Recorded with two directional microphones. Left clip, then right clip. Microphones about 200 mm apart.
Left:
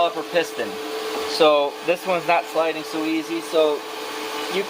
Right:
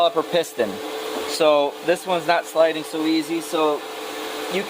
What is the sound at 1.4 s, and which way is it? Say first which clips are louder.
Speech: left 1 dB; 45° right (ahead or behind).